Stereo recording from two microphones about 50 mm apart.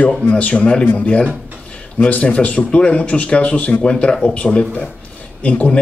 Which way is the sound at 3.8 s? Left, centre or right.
Centre.